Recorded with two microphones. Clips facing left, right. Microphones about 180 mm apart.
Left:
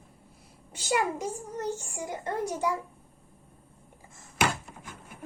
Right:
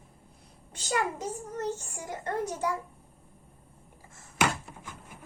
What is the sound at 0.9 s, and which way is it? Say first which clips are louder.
A child's voice: left 1 dB; 10° left (ahead or behind).